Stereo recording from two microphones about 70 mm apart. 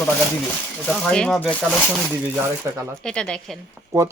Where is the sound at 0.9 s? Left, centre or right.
Centre.